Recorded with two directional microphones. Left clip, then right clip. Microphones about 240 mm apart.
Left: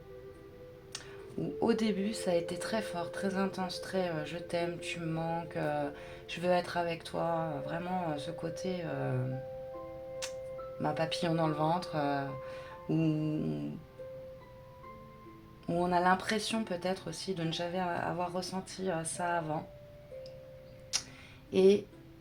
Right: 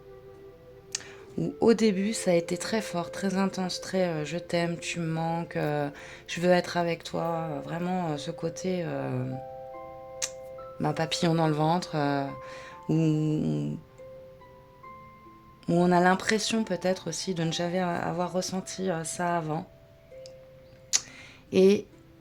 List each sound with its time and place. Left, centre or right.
0.9 s music: right
1.5 s speech: right
10.8 s speech: right
15.6 s speech: right
20.9 s tick-tock: right
21.5 s speech: right